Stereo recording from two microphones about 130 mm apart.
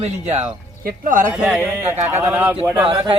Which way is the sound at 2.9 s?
40° right (ahead or behind).